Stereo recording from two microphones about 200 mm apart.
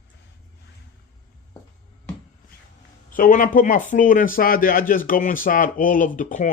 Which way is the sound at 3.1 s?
40° left (ahead or behind).